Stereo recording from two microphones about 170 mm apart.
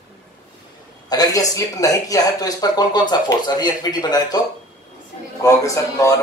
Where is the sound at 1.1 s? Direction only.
20° left (ahead or behind).